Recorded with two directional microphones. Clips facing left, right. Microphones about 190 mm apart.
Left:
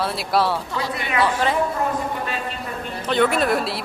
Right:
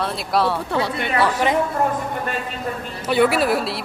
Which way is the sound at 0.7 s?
65° right (ahead or behind).